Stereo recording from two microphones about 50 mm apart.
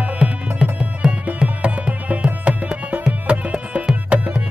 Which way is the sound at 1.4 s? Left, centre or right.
Right.